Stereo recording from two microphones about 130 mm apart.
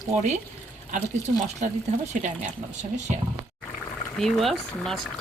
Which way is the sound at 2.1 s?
65° right (ahead or behind).